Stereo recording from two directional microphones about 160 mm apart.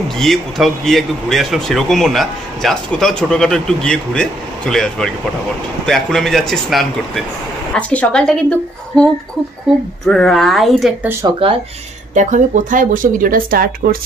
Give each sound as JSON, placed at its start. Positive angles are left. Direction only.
{"t": 0.2, "sound": "a woman's voice", "side_deg": 0}
{"t": 11.2, "sound": "speech", "side_deg": -20}
{"t": 12.1, "sound": "speech", "side_deg": -50}